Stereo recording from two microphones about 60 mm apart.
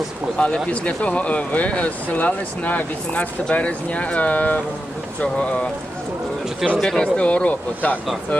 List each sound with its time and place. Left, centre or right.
0.3 s speech: centre
6.8 s speech: centre